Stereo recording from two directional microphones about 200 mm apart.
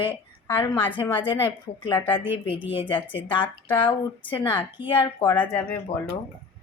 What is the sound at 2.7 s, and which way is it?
Speech, 25° left (ahead or behind).